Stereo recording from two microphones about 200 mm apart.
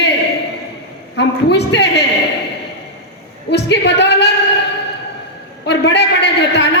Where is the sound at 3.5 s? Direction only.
60° left (ahead or behind).